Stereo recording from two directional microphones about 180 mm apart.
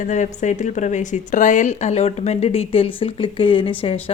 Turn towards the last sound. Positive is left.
turn(degrees=30)  # may be behind; listen again after turning